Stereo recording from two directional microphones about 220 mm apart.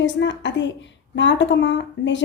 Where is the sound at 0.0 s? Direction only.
55° left (ahead or behind).